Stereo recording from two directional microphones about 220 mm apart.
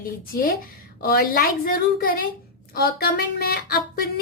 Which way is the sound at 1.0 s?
45° left (ahead or behind).